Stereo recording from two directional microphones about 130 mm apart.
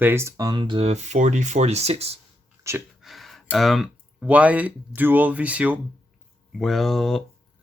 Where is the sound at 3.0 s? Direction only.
Centre (ahead or behind).